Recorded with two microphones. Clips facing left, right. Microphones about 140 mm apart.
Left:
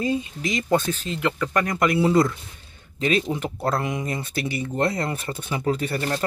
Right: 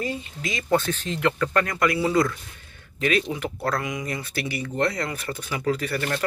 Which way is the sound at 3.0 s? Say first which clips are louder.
Left 1 dB; 25° left (ahead or behind).